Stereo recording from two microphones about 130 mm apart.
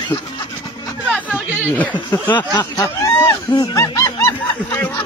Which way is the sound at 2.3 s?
30° left (ahead or behind).